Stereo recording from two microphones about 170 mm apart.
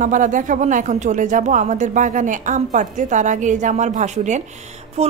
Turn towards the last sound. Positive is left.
turn(degrees=-40)  # may be behind; listen again after turning